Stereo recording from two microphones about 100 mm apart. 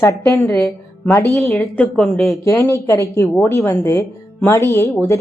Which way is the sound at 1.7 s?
10° left (ahead or behind).